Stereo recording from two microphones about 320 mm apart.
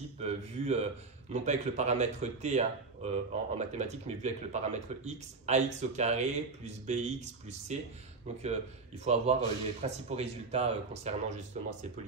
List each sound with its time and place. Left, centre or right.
0.2 s speech: centre
9.0 s speech: centre